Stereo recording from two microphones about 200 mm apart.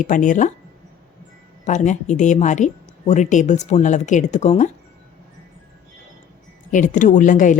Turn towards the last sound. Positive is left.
turn(degrees=40)  # may be behind; listen again after turning